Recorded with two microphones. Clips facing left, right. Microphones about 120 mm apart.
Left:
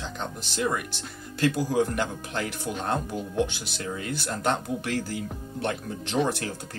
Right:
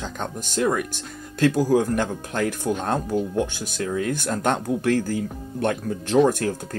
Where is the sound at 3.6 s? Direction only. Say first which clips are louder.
Right 7 dB; 50° right (ahead or behind).